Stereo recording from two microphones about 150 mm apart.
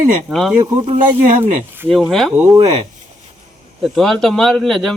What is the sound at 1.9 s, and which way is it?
Speech, centre (ahead or behind).